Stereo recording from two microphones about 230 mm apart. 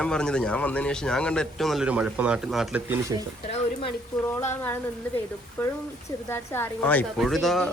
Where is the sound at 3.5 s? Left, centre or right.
Left.